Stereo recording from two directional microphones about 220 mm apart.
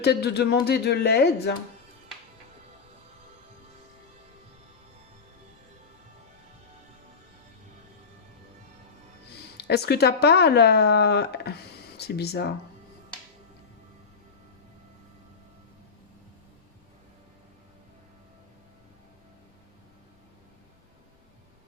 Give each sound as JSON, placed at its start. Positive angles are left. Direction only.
{"t": 0.0, "sound": "speech", "side_deg": 50}
{"t": 9.6, "sound": "speech", "side_deg": 50}